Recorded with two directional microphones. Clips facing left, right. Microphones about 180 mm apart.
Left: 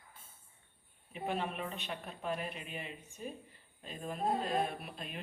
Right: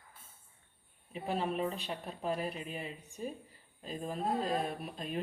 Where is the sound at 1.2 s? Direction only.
35° right (ahead or behind).